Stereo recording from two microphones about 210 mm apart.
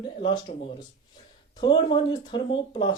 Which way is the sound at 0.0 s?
25° left (ahead or behind).